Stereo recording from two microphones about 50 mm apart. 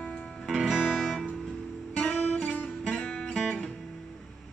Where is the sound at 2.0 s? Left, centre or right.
Centre.